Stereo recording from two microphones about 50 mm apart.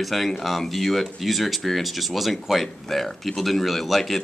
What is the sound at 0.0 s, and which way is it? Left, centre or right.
Speech, centre.